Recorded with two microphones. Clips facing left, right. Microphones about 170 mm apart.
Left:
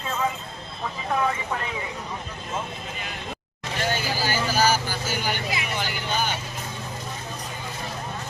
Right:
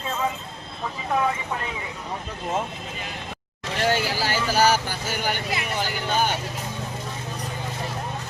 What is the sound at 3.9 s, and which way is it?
Speech, 75° right (ahead or behind).